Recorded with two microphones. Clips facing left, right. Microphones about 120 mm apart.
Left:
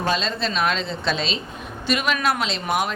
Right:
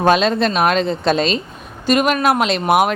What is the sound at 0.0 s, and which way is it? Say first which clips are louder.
A woman's voice: right 9 dB; 60° right (ahead or behind).